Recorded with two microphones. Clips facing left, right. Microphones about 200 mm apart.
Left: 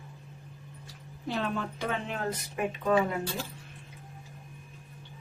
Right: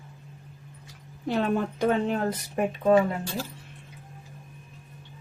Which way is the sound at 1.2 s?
45° right (ahead or behind).